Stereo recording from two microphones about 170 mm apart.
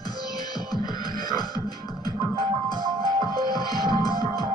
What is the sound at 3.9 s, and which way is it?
Music, 20° left (ahead or behind).